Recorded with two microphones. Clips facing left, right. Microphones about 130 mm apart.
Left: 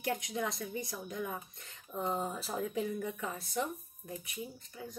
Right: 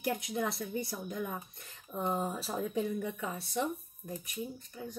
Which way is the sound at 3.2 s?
25° right (ahead or behind).